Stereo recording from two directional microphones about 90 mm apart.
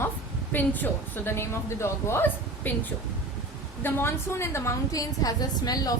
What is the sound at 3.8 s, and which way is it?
A woman's voice, 25° left (ahead or behind).